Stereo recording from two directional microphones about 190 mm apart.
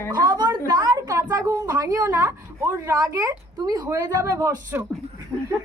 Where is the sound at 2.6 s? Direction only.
10° right (ahead or behind).